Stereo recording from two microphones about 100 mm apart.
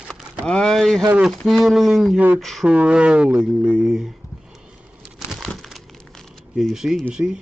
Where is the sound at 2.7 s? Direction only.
10° right (ahead or behind).